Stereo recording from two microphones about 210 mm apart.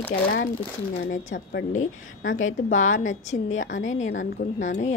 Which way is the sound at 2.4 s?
70° left (ahead or behind).